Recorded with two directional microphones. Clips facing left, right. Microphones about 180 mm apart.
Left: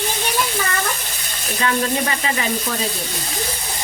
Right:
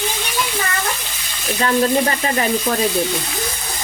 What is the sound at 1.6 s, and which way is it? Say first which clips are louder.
Speech: right 4 dB; 40° right (ahead or behind).